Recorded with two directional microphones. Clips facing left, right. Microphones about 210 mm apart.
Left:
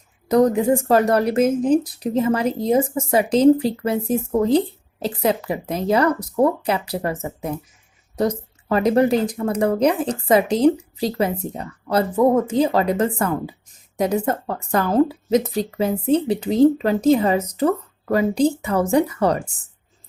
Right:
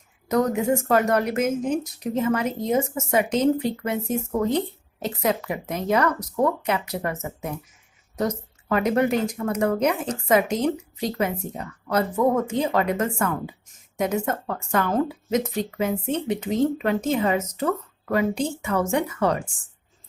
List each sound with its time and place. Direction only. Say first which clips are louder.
0.3 s speech: left 5 dB; 35° left (ahead or behind)